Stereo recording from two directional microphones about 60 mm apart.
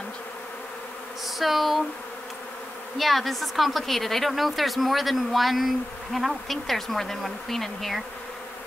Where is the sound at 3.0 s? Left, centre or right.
Centre.